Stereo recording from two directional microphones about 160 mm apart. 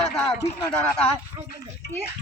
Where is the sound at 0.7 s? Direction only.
10° left (ahead or behind).